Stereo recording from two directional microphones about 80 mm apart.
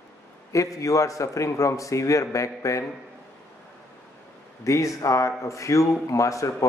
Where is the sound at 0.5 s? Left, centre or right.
Left.